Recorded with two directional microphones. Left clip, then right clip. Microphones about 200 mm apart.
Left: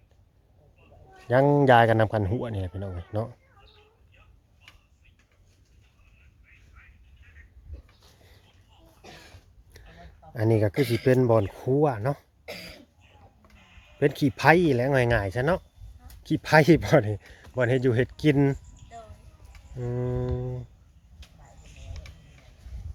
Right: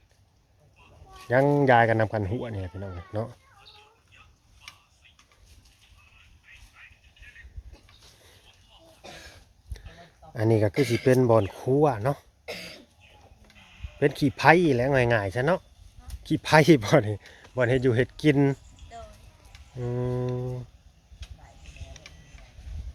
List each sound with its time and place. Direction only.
1.3 s speech: 10° left (ahead or behind)
6.8 s telephone: 45° right (ahead or behind)
9.7 s speech: 5° left (ahead or behind)
21.6 s mechanisms: 30° left (ahead or behind)